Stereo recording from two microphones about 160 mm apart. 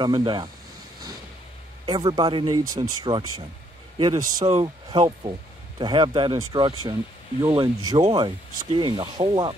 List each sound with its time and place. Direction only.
0.0 s speech: 30° right (ahead or behind)
1.9 s speech: 25° right (ahead or behind)